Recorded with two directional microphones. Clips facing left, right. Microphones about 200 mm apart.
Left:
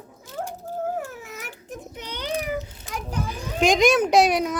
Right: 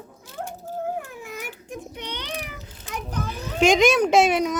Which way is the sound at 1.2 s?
Centre (ahead or behind).